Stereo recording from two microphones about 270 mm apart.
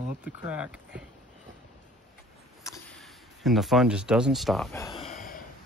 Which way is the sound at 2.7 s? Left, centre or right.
Centre.